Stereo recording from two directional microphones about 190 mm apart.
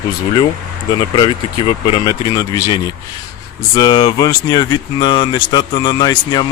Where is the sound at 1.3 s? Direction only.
30° left (ahead or behind).